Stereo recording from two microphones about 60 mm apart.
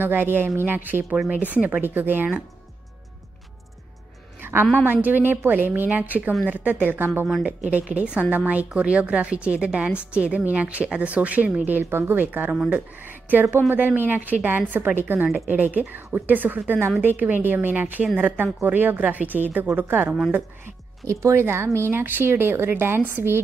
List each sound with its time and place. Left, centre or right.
0.0 s speech: right
4.4 s a sound: right
4.8 s a woman's voice: right
7.9 s a woman's voice: right
11.8 s a woman's voice: right
21.1 s speech: right